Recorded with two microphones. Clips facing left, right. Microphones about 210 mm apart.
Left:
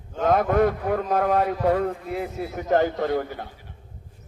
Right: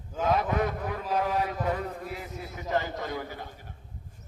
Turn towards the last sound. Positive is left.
turn(degrees=50)  # may be behind; listen again after turning